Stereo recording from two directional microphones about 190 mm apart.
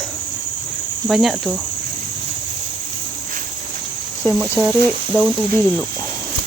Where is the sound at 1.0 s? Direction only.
Centre (ahead or behind).